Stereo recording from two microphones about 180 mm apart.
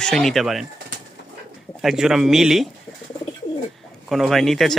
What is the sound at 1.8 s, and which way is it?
Speech, 5° right (ahead or behind).